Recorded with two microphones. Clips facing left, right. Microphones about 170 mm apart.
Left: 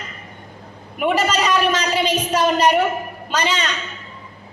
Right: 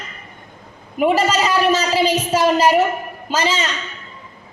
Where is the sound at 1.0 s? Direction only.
30° right (ahead or behind).